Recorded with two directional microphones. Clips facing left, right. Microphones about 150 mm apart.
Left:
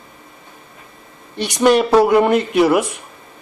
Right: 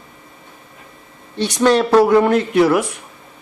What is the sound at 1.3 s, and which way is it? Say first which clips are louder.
Speech: left 1 dB; 15° left (ahead or behind).